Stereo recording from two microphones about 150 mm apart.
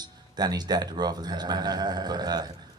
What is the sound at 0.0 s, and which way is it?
Speech, 25° right (ahead or behind).